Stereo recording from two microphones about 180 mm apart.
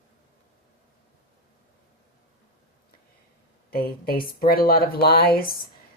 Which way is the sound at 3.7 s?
60° left (ahead or behind).